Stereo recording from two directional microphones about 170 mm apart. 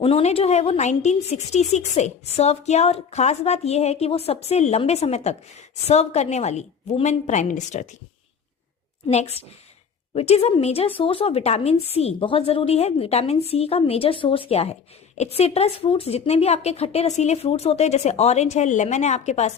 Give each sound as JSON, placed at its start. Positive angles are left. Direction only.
{"t": 0.0, "sound": "speech", "side_deg": 35}
{"t": 9.0, "sound": "speech", "side_deg": 40}